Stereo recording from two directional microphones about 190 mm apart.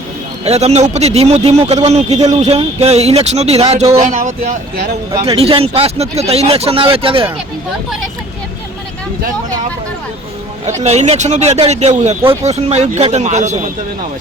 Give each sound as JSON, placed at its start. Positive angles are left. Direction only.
{"t": 0.4, "sound": "speech", "side_deg": -35}
{"t": 5.2, "sound": "speech", "side_deg": -30}
{"t": 10.7, "sound": "speech", "side_deg": -35}